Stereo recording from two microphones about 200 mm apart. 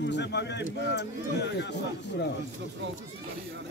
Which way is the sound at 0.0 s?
60° left (ahead or behind).